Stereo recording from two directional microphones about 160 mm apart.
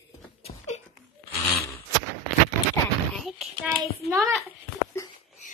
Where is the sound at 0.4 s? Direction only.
40° left (ahead or behind).